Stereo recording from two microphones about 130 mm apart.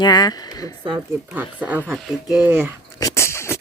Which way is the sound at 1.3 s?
10° right (ahead or behind).